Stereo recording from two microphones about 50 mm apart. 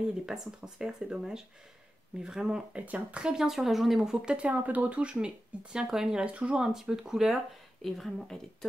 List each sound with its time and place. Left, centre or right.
0.3 s speech: centre
2.7 s speech: right
3.2 s speech: centre
3.4 s speech: centre
4.5 s speech: right; by 6.2 s centre
6.2 s speech: right
6.6 s speech: centre
7.8 s speech: centre